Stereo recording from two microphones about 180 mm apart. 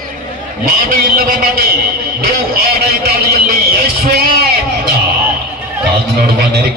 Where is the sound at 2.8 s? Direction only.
60° right (ahead or behind).